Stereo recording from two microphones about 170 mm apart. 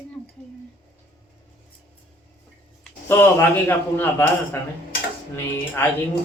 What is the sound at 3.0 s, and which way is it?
A man's voice, 10° left (ahead or behind).